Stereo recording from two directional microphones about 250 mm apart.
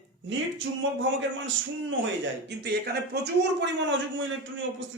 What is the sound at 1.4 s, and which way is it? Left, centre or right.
Speech, right.